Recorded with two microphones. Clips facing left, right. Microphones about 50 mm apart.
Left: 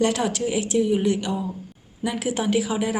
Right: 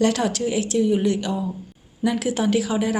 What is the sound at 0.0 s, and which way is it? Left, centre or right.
A woman's voice, centre.